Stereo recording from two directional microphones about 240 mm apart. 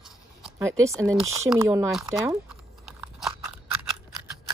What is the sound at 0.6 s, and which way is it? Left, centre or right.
Speech, centre.